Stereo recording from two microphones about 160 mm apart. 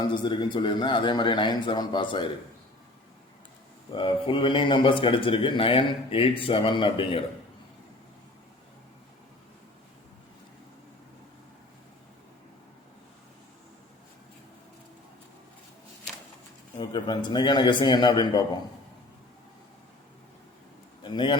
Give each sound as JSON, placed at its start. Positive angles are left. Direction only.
{"t": 0.0, "sound": "a man's voice", "side_deg": 30}
{"t": 3.9, "sound": "a man's voice", "side_deg": 30}
{"t": 16.7, "sound": "a man's voice", "side_deg": 30}
{"t": 21.0, "sound": "a man's voice", "side_deg": 30}